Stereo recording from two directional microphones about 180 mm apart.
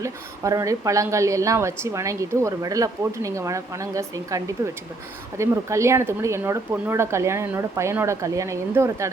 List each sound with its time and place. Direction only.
0.0 s a woman's voice: 20° right (ahead or behind)